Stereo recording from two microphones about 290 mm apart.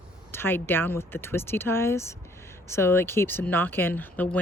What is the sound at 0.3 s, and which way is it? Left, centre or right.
Speech, centre.